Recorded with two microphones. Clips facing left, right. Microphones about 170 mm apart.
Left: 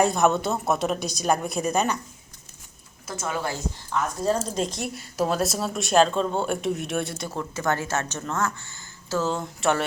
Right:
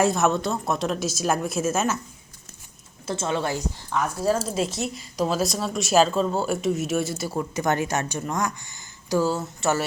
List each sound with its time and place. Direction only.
0.0 s speech: centre (ahead or behind)
3.1 s a woman's voice: 25° right (ahead or behind)
4.4 s speech: 5° right (ahead or behind)